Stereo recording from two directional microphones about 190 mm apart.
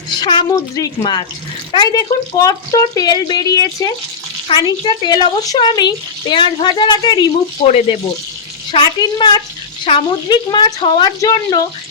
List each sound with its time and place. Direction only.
0.2 s speech: 25° left (ahead or behind)